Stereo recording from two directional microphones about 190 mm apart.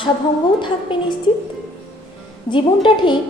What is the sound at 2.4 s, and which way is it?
Speech, 25° left (ahead or behind).